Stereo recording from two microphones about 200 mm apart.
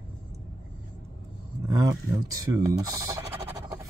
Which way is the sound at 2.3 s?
15° right (ahead or behind).